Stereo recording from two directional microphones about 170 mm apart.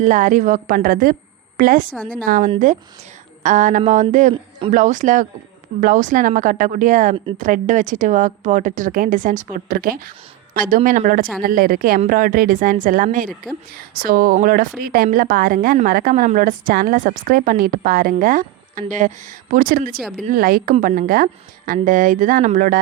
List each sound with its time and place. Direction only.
0.0 s a woman's voice: 50° right (ahead or behind)
20.0 s speech: centre (ahead or behind)
20.3 s a woman's voice: 60° right (ahead or behind)
20.7 s a woman's voice: 50° right (ahead or behind)